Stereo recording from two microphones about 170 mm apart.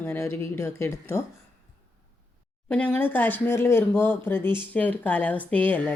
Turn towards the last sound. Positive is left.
turn(degrees=10)  # may be behind; listen again after turning